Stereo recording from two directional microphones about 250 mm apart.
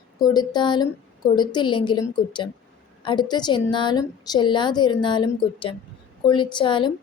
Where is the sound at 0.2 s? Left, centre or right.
Centre.